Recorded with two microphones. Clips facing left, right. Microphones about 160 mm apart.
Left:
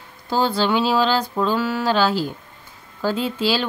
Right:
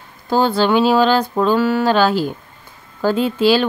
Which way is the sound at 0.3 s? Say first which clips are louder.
Right 5 dB; 55° right (ahead or behind).